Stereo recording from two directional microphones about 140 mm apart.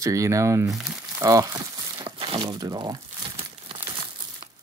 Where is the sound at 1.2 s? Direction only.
25° right (ahead or behind).